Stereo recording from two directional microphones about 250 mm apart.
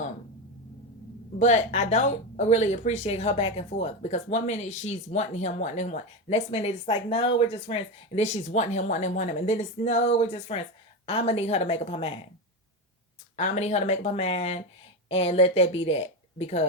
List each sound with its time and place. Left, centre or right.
1.4 s speech: left
13.3 s speech: left